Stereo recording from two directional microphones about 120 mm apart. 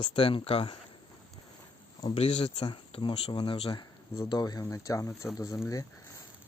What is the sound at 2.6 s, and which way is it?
Speech, 40° left (ahead or behind).